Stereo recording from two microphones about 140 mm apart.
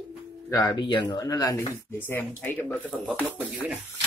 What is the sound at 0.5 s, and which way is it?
Speech, 25° left (ahead or behind).